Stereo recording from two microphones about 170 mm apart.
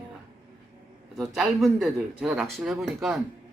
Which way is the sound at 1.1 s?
Centre (ahead or behind).